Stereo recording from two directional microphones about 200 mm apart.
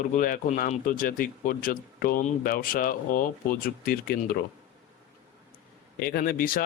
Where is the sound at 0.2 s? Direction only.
40° left (ahead or behind).